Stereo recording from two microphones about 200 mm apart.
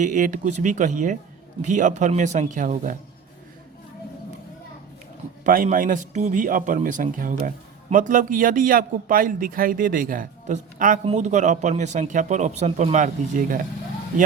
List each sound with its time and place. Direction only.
0.0 s speech: 40° right (ahead or behind)
5.4 s a man's voice: 40° right (ahead or behind)